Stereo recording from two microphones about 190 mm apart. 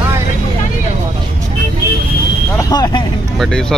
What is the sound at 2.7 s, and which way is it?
Speech, 20° left (ahead or behind).